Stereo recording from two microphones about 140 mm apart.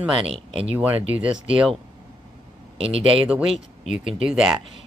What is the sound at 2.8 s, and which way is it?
Speech, 45° right (ahead or behind).